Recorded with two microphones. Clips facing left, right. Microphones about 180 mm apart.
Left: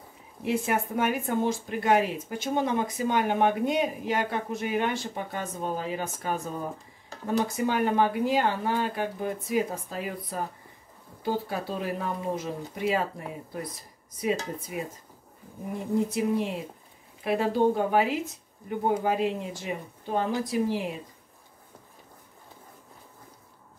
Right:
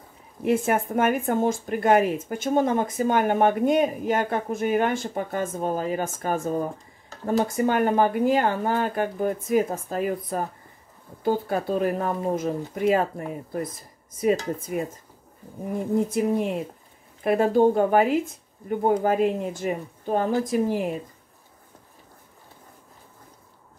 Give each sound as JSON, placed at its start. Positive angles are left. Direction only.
{"t": 0.4, "sound": "speech", "side_deg": -50}
{"t": 14.2, "sound": "speech", "side_deg": -50}
{"t": 16.1, "sound": "speech", "side_deg": -50}